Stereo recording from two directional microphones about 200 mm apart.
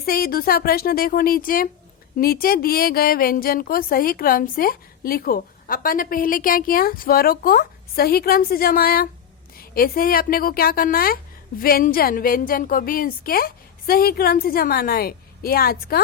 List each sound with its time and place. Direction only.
0.0 s a woman's voice: 50° left (ahead or behind)